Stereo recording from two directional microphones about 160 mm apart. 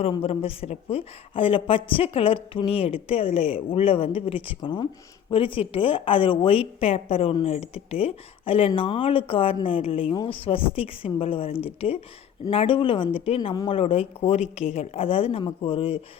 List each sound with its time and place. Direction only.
0.0 s a woman's voice: 35° left (ahead or behind)